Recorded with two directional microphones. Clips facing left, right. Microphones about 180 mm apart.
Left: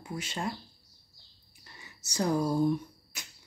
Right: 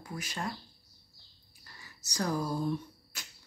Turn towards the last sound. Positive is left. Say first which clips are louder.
# left 4 dB
turn(degrees=20)  # may be behind; listen again after turning